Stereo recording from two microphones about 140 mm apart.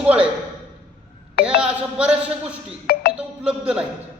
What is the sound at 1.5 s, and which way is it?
A man's voice, 5° right (ahead or behind).